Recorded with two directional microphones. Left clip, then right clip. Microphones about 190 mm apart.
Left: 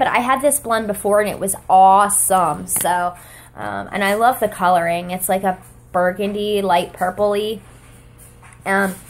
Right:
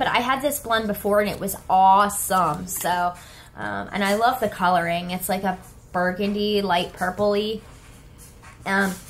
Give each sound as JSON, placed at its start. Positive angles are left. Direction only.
{"t": 0.0, "sound": "speech", "side_deg": 35}
{"t": 8.6, "sound": "speech", "side_deg": 35}